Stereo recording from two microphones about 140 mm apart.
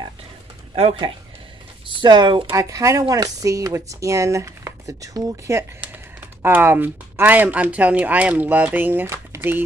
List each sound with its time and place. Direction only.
1.9 s speech: 35° right (ahead or behind)
2.5 s speech: 25° right (ahead or behind)